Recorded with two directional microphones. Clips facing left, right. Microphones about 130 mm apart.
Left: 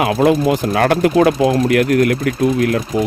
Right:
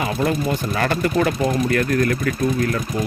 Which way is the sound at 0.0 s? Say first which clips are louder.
Left 8 dB; 85° left.